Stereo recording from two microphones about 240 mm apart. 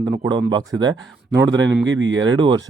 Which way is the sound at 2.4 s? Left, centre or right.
Centre.